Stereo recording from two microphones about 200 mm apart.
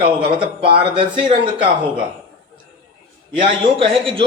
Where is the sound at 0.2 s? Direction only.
25° right (ahead or behind).